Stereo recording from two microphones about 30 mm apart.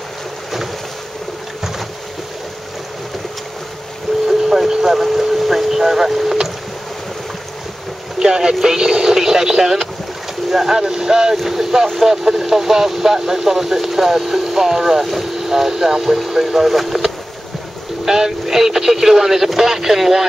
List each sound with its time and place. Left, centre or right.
4.3 s boat: centre
5.1 s a sound: centre
5.8 s speech: centre
8.2 s speech: right